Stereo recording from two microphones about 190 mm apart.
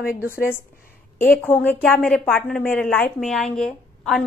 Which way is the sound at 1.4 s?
10° left (ahead or behind).